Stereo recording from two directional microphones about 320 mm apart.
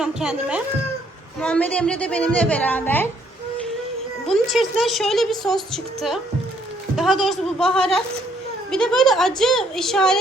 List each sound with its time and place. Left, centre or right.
0.0 s a woman's voice: centre
4.3 s a woman's voice: centre